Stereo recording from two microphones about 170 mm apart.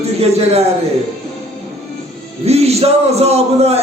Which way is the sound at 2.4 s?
40° right (ahead or behind).